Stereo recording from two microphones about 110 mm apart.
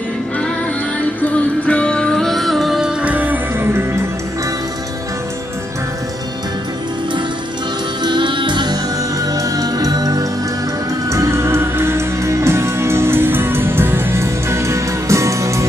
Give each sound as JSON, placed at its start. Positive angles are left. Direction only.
{"t": 1.2, "sound": "music", "side_deg": 10}
{"t": 3.0, "sound": "music", "side_deg": -15}
{"t": 8.0, "sound": "music", "side_deg": -45}